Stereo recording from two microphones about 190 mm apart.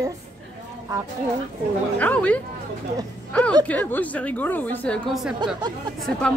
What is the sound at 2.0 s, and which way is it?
A woman's voice, 5° left (ahead or behind).